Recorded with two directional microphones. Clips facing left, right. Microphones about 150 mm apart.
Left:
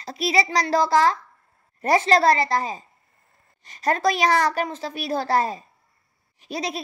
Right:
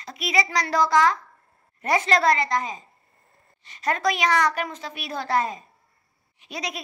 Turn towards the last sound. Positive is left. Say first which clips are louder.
# left 4 dB
turn(degrees=30)  # may be behind; listen again after turning